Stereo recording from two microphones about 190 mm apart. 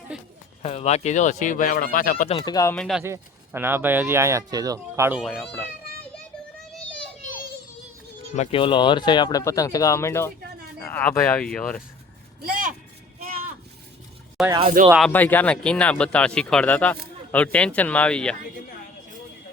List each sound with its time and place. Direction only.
0.1 s speech: 5° right (ahead or behind)
0.6 s speech: 35° left (ahead or behind)
2.3 s speech: 20° left (ahead or behind)
2.7 s speech: centre (ahead or behind)
3.0 s speech: 15° right (ahead or behind)
5.2 s speech: centre (ahead or behind)
8.4 s speech: 30° left (ahead or behind); by 11.8 s 5° left (ahead or behind)
13.1 s a sound: 50° right (ahead or behind)
14.4 s speech: centre (ahead or behind)
15.1 s speech: 10° left (ahead or behind)